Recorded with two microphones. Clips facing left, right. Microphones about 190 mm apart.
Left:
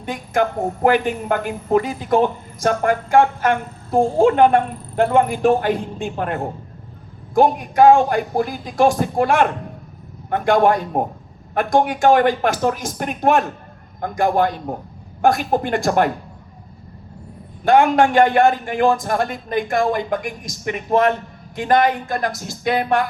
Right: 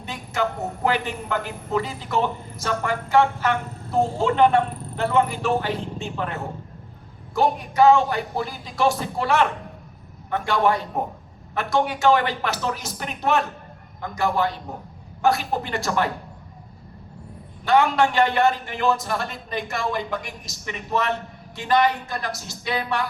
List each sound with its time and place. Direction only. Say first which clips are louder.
0.0 s a woman's voice: left 6 dB; 50° left (ahead or behind)
17.7 s a woman's voice: left 5 dB; 50° left (ahead or behind)